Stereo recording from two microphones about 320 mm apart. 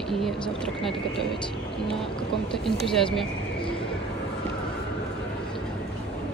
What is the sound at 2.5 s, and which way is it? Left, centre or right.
Speech, centre.